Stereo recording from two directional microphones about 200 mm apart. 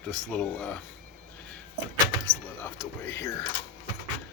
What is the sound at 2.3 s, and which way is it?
Speech, 10° left (ahead or behind).